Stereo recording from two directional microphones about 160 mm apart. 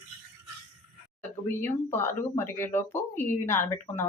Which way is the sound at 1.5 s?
15° left (ahead or behind).